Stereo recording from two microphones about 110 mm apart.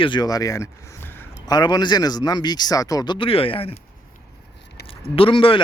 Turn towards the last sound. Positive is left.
turn(degrees=55)  # may be behind; listen again after turning